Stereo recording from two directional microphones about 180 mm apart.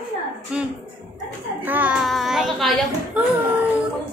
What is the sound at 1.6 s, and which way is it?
Child singing, 10° right (ahead or behind).